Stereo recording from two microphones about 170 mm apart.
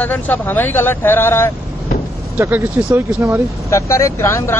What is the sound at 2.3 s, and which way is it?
Speech, 10° right (ahead or behind).